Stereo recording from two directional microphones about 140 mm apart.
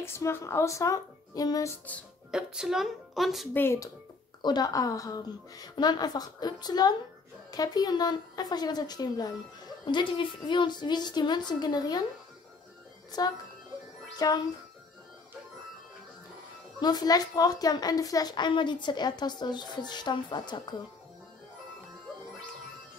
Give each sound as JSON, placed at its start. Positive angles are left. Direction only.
{"t": 0.0, "sound": "a woman's voice", "side_deg": 15}
{"t": 1.9, "sound": "speech", "side_deg": 10}
{"t": 2.3, "sound": "speech", "side_deg": -5}
{"t": 3.5, "sound": "speech", "side_deg": 20}
{"t": 4.4, "sound": "a woman's voice", "side_deg": 30}
{"t": 14.1, "sound": "speech", "side_deg": 25}
{"t": 16.8, "sound": "a woman's voice", "side_deg": 30}